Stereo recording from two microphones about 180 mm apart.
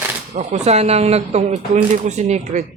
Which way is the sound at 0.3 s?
35° right (ahead or behind).